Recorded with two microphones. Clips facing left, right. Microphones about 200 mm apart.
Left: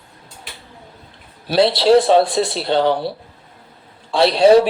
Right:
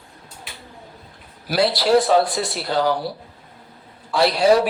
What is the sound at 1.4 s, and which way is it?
Speech, 25° left (ahead or behind).